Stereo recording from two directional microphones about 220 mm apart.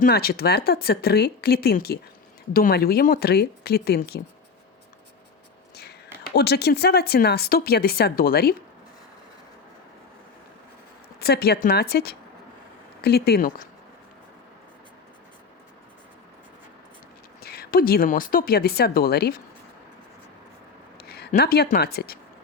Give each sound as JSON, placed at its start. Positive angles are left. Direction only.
{"t": 0.0, "sound": "speech", "side_deg": 45}
{"t": 6.3, "sound": "speech", "side_deg": 50}
{"t": 11.2, "sound": "speech", "side_deg": 45}
{"t": 17.4, "sound": "speech", "side_deg": 45}
{"t": 21.0, "sound": "speech", "side_deg": 45}